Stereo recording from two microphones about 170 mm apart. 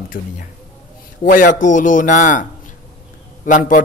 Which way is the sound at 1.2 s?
50° left (ahead or behind).